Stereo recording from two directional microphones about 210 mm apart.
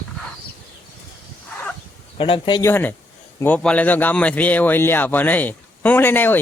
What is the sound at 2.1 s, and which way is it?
A man's voice, 25° left (ahead or behind).